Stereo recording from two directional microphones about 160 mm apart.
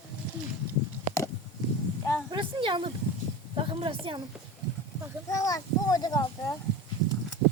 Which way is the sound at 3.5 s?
35° right (ahead or behind).